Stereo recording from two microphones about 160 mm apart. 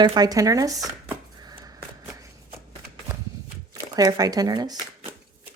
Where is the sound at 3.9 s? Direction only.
25° right (ahead or behind).